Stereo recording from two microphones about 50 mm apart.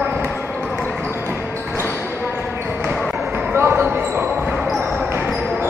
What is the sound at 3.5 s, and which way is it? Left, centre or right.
Basketball bounce, right.